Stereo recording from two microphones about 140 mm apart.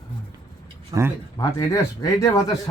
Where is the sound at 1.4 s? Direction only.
25° left (ahead or behind).